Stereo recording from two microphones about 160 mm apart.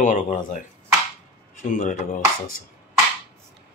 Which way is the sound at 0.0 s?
55° left (ahead or behind).